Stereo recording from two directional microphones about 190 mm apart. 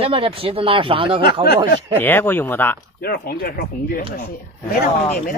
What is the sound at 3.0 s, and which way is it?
Speech, 55° left (ahead or behind).